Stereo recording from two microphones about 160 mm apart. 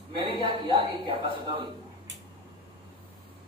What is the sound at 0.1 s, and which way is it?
A woman's voice, 30° right (ahead or behind).